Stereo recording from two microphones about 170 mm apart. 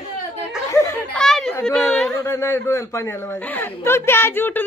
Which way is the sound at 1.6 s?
5° left (ahead or behind).